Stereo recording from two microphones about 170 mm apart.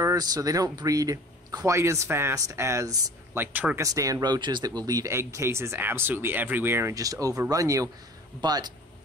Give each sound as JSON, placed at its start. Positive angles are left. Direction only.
{"t": 0.0, "sound": "speech", "side_deg": -20}